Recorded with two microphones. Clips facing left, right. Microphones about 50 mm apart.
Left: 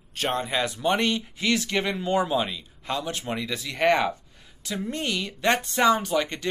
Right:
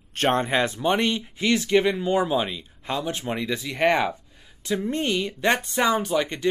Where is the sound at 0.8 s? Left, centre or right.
Centre.